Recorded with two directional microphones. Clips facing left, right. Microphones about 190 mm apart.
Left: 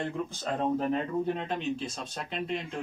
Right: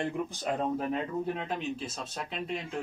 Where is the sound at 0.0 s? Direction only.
15° right (ahead or behind).